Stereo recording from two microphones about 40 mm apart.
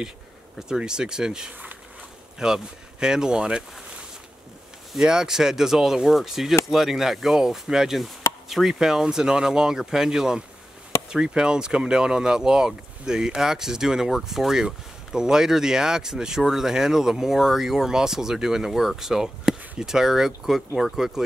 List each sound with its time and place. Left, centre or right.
0.6 s speech: centre
5.0 s speech: centre